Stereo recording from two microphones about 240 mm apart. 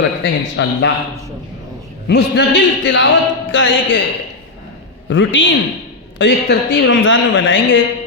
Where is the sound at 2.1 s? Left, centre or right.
Left.